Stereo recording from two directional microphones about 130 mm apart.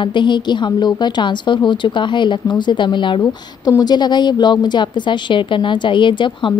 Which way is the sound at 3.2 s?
25° left (ahead or behind).